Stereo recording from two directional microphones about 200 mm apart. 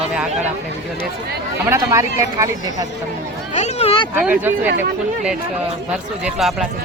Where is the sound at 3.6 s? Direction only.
35° left (ahead or behind).